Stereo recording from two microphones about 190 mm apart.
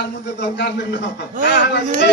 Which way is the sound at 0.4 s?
65° left (ahead or behind).